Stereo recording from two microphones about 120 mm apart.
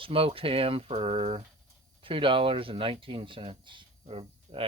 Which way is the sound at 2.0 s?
45° right (ahead or behind).